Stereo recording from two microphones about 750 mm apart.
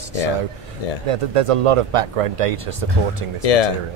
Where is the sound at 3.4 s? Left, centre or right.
Left.